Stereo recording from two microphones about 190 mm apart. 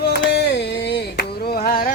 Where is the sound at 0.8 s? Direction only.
60° left (ahead or behind).